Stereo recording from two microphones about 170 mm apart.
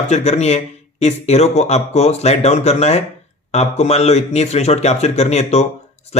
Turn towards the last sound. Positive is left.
turn(degrees=40)  # may be behind; listen again after turning